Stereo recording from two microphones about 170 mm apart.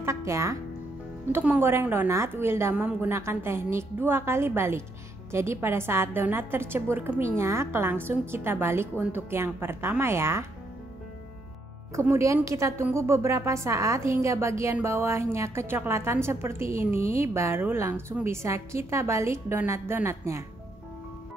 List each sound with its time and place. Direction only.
0.0 s music: 15° right (ahead or behind)
1.3 s a woman's voice: 10° right (ahead or behind)
11.9 s a woman's voice: 15° right (ahead or behind)